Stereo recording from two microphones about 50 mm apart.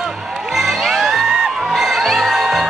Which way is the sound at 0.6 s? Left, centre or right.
Centre.